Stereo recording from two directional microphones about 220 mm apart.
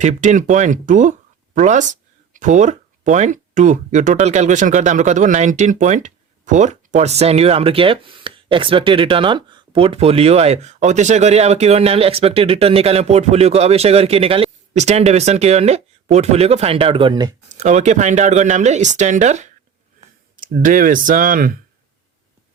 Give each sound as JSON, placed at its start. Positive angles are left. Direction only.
{"t": 0.0, "sound": "speech", "side_deg": -35}
{"t": 17.5, "sound": "speech", "side_deg": -30}